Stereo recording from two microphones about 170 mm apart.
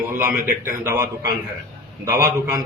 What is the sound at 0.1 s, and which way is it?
Speech, 10° right (ahead or behind).